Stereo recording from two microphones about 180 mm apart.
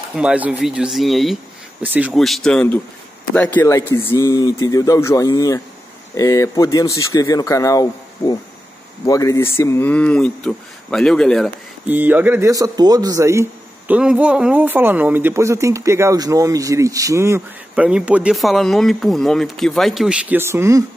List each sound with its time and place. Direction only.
0.2 s speech: 5° right (ahead or behind)
11.9 s a man's voice: 10° right (ahead or behind)